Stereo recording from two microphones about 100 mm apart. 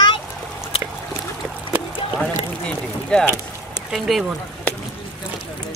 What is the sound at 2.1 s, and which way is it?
Speech, 10° left (ahead or behind).